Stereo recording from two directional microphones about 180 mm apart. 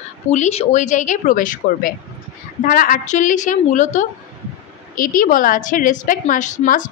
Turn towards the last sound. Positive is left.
turn(degrees=45)  # may be behind; listen again after turning